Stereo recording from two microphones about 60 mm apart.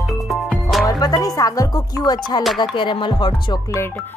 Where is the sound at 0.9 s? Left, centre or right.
Left.